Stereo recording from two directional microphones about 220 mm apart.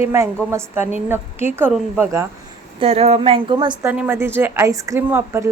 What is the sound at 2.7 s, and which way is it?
Speech, 25° right (ahead or behind).